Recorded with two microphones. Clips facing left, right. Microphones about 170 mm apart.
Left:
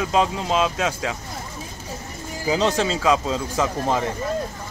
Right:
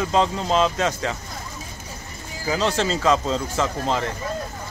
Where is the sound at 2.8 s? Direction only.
5° left (ahead or behind).